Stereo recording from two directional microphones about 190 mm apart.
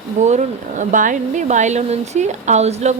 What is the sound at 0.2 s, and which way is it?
Speech, 40° right (ahead or behind).